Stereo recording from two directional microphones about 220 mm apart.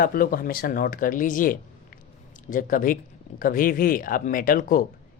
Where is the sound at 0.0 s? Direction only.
40° left (ahead or behind).